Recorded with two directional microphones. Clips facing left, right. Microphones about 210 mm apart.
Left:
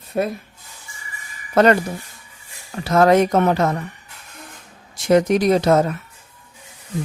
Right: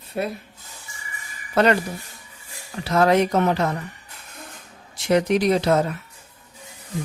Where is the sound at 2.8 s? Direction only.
45° left (ahead or behind).